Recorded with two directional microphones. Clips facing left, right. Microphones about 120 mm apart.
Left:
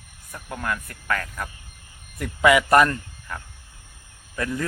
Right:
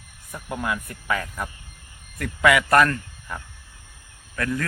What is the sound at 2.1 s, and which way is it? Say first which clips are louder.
Speech: left 1 dB; 15° left (ahead or behind).